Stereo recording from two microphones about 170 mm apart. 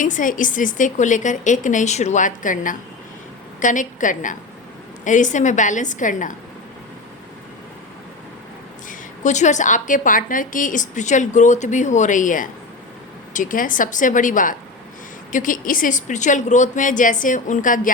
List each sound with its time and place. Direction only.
0.0 s a woman's voice: 50° left (ahead or behind)
8.9 s a woman's voice: 45° left (ahead or behind)